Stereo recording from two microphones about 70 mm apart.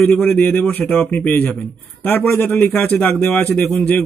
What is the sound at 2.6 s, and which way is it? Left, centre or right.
Speech, left.